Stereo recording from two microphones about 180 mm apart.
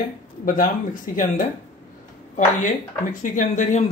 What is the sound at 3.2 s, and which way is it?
Speech, 45° left (ahead or behind).